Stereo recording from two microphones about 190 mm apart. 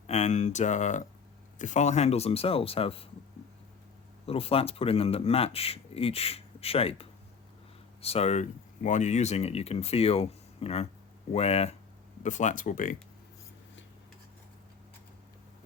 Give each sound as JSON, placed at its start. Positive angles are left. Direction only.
{"t": 0.1, "sound": "speech", "side_deg": 35}
{"t": 4.3, "sound": "speech", "side_deg": 30}